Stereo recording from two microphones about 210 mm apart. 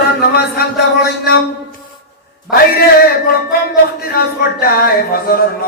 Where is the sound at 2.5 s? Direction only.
45° left (ahead or behind).